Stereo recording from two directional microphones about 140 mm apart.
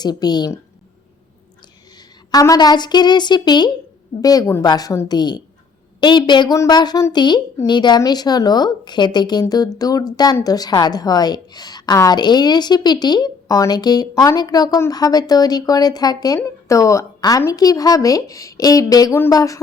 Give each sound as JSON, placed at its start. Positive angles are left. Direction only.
{"t": 0.0, "sound": "a woman's voice", "side_deg": 30}
{"t": 2.0, "sound": "a woman's voice", "side_deg": 25}